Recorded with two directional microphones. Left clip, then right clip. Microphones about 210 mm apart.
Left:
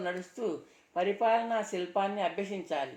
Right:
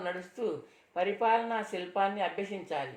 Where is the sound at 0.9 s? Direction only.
40° left (ahead or behind).